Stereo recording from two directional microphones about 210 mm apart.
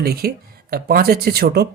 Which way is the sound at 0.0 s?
50° right (ahead or behind).